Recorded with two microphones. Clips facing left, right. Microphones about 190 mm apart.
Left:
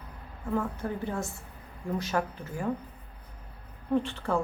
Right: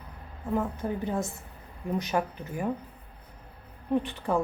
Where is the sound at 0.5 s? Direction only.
15° right (ahead or behind).